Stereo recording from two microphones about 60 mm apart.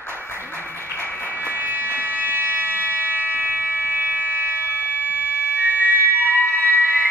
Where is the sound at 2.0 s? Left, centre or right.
Right.